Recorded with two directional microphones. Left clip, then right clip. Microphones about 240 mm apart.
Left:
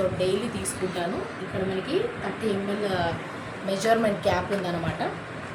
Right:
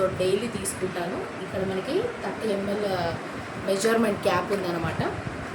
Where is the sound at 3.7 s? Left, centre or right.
Centre.